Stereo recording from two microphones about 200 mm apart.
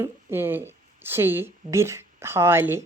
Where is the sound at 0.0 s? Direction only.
10° right (ahead or behind).